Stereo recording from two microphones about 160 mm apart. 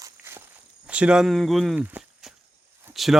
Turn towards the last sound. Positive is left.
turn(degrees=0)  # may be behind; listen again after turning